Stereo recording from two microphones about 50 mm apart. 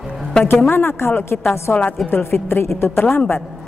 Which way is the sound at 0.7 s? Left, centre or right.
Left.